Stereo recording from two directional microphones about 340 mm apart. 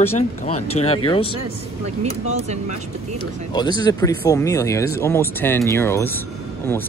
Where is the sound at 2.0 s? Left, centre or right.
Centre.